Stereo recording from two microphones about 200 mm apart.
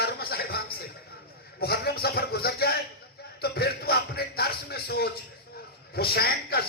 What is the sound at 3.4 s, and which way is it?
Music, 50° left (ahead or behind).